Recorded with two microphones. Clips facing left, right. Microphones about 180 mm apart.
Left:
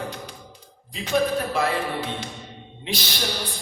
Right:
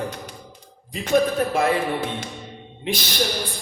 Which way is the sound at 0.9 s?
50° right (ahead or behind).